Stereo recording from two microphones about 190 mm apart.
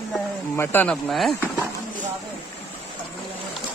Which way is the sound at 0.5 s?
10° left (ahead or behind).